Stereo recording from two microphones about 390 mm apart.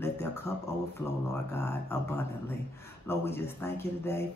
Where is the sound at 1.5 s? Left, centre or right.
Centre.